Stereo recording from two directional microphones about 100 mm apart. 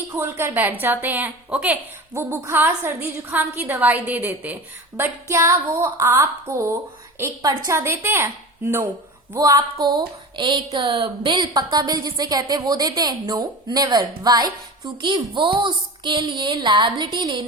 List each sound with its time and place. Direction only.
0.2 s a woman's voice: 20° right (ahead or behind)
2.1 s a woman's voice: 25° right (ahead or behind)
9.3 s speech: 35° right (ahead or behind)